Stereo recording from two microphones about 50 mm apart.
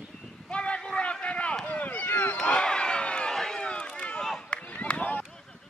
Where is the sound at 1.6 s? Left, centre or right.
Left.